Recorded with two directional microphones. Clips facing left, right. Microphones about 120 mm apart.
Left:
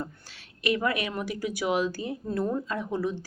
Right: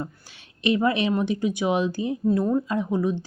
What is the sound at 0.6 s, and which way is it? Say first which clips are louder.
Speech: right 5 dB; 25° right (ahead or behind).